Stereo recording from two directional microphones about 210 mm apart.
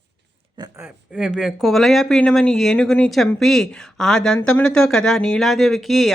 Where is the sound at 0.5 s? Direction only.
20° right (ahead or behind).